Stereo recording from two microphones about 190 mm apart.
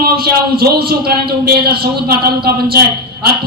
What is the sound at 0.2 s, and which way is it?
A man's voice, 55° right (ahead or behind).